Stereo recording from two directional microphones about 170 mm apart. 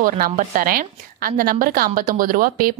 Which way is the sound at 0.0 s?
50° right (ahead or behind).